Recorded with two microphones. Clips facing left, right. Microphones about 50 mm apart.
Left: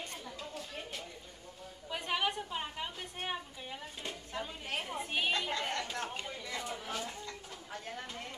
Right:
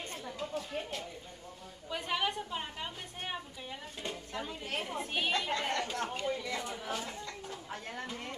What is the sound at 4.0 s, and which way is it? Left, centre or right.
A woman's voice, centre.